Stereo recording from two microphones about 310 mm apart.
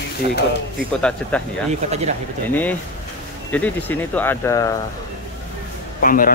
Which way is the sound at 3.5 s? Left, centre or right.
Centre.